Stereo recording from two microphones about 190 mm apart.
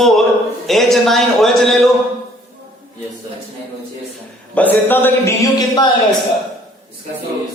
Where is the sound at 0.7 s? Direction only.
Centre (ahead or behind).